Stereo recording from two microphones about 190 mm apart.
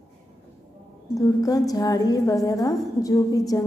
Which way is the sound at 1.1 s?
20° left (ahead or behind).